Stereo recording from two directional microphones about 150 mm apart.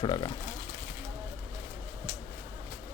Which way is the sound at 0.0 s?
30° left (ahead or behind).